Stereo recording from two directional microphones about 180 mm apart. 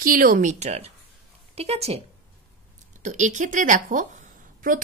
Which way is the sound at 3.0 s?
45° right (ahead or behind).